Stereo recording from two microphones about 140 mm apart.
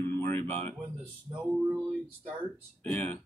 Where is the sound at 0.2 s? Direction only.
20° left (ahead or behind).